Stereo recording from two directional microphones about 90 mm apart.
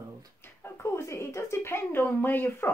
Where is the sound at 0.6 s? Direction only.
30° left (ahead or behind).